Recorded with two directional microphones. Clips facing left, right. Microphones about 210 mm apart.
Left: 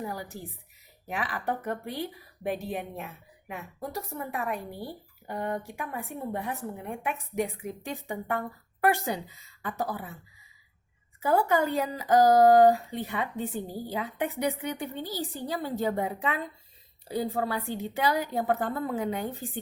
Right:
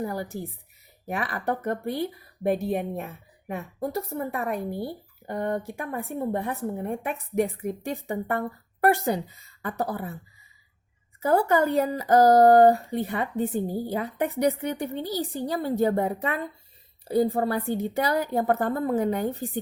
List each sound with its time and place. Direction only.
0.0 s a woman's voice: 45° right (ahead or behind)
11.2 s a woman's voice: 40° right (ahead or behind)
12.4 s female singing: 55° right (ahead or behind)
12.7 s a woman's voice: 40° right (ahead or behind)
17.5 s speech: 50° right (ahead or behind)